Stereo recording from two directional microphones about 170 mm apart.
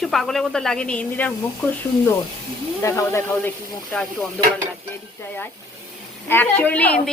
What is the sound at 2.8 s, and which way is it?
Speech, 15° left (ahead or behind).